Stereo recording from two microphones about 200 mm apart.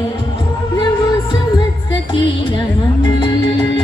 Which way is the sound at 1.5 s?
25° left (ahead or behind).